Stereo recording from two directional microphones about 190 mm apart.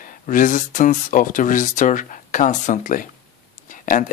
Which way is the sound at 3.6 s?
40° left (ahead or behind).